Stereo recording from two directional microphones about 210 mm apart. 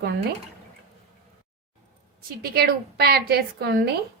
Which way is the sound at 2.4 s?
50° right (ahead or behind).